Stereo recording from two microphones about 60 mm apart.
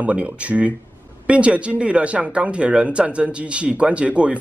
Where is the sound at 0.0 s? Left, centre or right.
Right.